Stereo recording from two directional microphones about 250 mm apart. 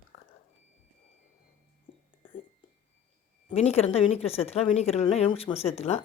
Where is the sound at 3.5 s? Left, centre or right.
Left.